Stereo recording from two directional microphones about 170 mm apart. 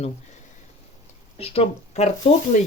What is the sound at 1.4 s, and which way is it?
Speech, 40° left (ahead or behind).